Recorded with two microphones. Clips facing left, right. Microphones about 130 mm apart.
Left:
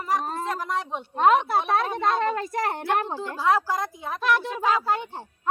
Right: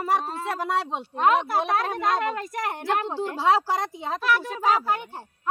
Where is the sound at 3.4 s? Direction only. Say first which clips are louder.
Right 1 dB; 75° right (ahead or behind).